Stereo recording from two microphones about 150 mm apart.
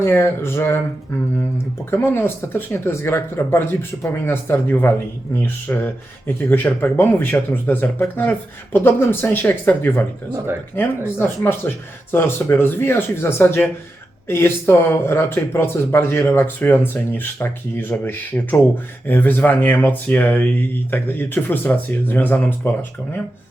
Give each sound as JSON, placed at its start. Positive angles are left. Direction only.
{"t": 0.0, "sound": "speech", "side_deg": 15}
{"t": 1.9, "sound": "speech", "side_deg": 15}